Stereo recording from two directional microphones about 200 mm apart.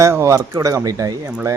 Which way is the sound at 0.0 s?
15° right (ahead or behind).